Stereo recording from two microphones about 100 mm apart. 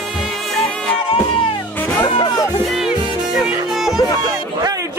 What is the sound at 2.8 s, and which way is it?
Music, 5° right (ahead or behind).